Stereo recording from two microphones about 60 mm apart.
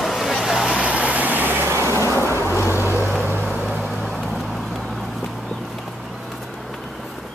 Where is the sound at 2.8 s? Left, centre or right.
Right.